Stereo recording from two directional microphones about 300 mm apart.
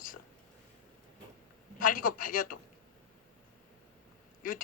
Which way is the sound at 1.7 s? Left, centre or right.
Left.